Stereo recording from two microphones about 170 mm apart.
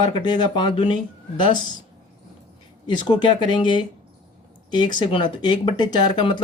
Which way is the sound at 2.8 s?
25° left (ahead or behind).